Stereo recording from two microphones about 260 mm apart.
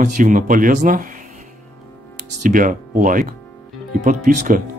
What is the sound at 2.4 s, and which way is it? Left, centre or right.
Speech, right.